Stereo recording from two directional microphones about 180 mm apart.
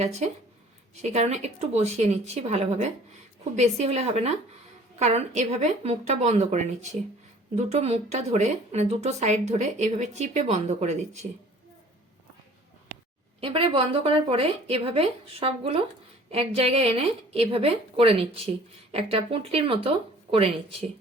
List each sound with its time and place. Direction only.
0.0 s a woman's voice: 35° right (ahead or behind)
13.4 s a woman's voice: 30° right (ahead or behind)